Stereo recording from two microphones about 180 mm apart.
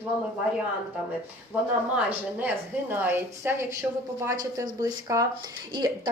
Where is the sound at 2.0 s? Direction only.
10° right (ahead or behind).